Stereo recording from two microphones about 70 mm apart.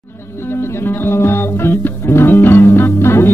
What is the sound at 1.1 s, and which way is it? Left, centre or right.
Music, left.